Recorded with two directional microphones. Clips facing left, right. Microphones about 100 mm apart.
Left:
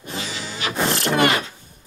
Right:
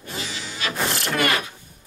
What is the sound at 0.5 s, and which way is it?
Music, 20° left (ahead or behind).